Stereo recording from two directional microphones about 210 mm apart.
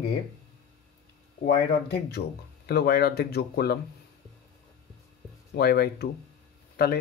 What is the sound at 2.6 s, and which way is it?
Speech, 50° left (ahead or behind).